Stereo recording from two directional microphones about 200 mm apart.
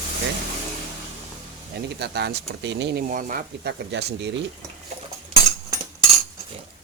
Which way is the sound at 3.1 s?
40° right (ahead or behind).